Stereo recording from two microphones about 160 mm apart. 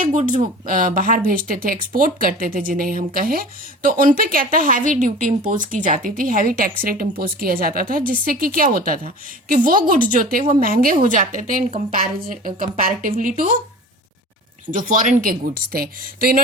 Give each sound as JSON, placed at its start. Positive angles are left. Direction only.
{"t": 0.0, "sound": "speech", "side_deg": -50}
{"t": 14.8, "sound": "speech", "side_deg": -55}